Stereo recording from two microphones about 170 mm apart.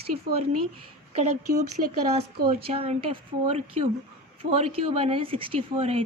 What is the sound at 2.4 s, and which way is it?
Speech, 65° right (ahead or behind).